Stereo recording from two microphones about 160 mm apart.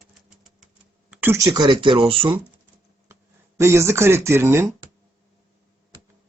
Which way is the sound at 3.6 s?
15° right (ahead or behind).